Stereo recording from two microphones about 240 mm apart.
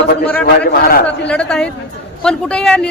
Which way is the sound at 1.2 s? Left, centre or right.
Centre.